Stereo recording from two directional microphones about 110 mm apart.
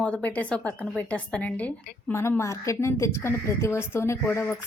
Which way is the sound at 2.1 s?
25° left (ahead or behind).